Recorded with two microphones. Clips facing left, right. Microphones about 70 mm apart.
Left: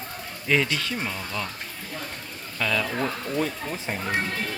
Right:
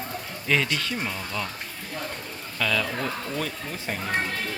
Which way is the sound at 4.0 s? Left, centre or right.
Centre.